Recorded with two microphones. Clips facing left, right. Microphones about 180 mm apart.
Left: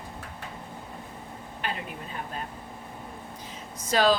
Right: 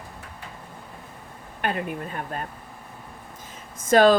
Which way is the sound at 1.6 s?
55° right (ahead or behind).